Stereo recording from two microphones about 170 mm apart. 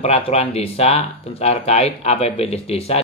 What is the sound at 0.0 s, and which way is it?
Speech, 40° left (ahead or behind).